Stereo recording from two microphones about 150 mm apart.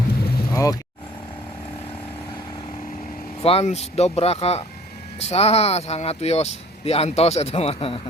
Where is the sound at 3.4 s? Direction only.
40° left (ahead or behind).